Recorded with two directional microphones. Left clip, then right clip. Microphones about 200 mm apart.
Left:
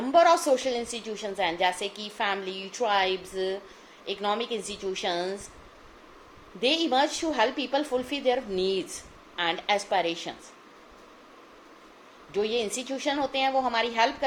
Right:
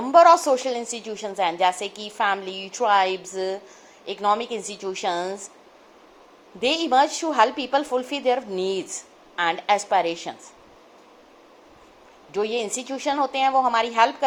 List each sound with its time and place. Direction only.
0.0 s a woman's voice: 15° right (ahead or behind)
6.6 s a woman's voice: 15° right (ahead or behind)
12.3 s a woman's voice: 15° right (ahead or behind)